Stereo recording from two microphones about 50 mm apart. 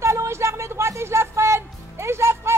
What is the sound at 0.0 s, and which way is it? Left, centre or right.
Music, right.